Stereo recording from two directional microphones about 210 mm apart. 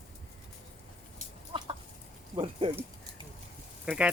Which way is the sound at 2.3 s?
25° right (ahead or behind).